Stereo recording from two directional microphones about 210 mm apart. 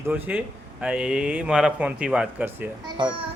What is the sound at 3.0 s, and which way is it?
Speech, 20° right (ahead or behind).